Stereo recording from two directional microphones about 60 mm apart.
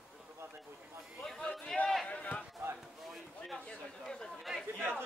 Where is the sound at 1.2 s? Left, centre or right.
Centre.